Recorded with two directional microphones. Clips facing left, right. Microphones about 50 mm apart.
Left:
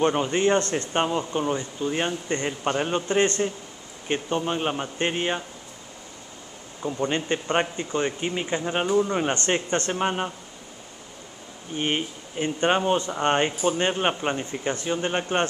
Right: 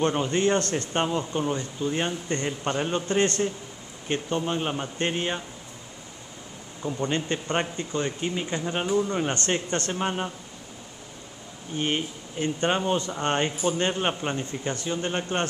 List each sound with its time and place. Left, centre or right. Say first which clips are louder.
0.0 s speech: left 2 dB; centre
6.8 s speech: left 2 dB; centre
11.7 s speech: left 1 dB; centre